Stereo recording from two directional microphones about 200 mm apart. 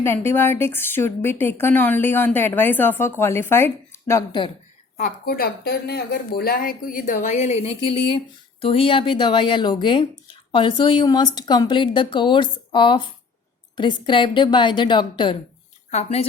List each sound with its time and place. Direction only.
0.0 s a woman's voice: 10° left (ahead or behind)
4.9 s a woman's voice: 45° left (ahead or behind)